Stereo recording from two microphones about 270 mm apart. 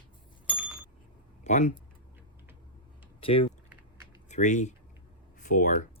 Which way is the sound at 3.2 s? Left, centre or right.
Centre.